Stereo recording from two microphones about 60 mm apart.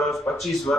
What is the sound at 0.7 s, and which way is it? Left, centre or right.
Speech, left.